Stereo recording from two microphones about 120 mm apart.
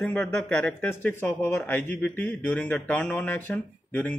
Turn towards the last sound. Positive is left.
turn(degrees=15)  # may be behind; listen again after turning